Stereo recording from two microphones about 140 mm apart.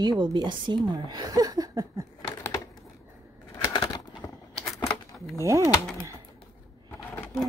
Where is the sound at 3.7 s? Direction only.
25° left (ahead or behind).